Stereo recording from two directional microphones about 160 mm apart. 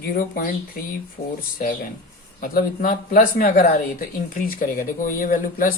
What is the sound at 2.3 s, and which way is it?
Speech, 65° left (ahead or behind).